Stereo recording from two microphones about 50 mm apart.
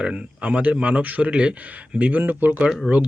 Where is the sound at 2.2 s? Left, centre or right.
Right.